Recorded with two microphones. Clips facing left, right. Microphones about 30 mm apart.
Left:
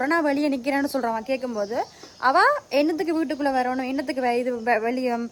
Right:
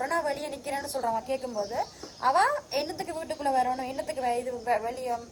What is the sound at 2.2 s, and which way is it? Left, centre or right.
Speech, left.